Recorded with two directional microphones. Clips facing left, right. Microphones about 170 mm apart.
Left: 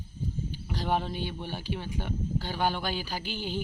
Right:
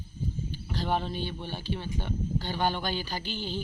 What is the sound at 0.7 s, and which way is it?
Speech, 10° left (ahead or behind).